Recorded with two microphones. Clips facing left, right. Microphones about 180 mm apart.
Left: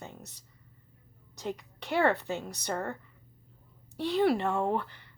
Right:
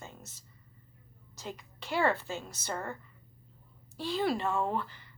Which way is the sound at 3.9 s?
65° left (ahead or behind).